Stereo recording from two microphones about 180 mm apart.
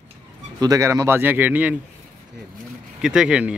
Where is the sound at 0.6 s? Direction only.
20° right (ahead or behind).